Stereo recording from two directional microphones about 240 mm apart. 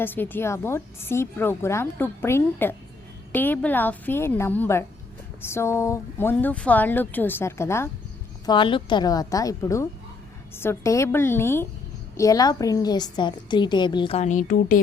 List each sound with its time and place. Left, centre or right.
0.0 s a woman's voice: centre; by 14.8 s left